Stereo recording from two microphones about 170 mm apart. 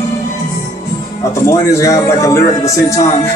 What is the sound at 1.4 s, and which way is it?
A man's voice, 15° left (ahead or behind).